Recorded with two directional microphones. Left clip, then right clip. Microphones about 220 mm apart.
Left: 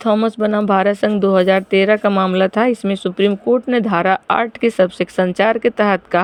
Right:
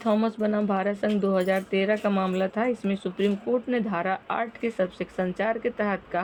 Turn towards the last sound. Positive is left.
turn(degrees=40)  # may be behind; listen again after turning